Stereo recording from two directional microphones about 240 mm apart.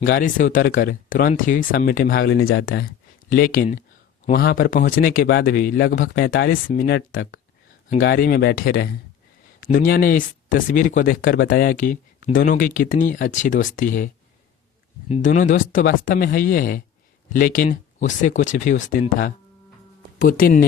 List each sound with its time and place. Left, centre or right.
0.0 s speech: left
6.2 s speech: left
6.5 s speech: left
15.1 s speech: left
20.2 s speech: left